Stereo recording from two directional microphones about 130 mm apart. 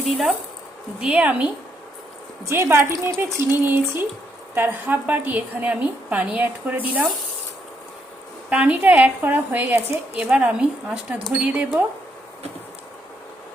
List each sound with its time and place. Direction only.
0.0 s a woman's voice: centre (ahead or behind)
2.5 s a woman's voice: 20° right (ahead or behind)
8.4 s a woman's voice: 10° right (ahead or behind)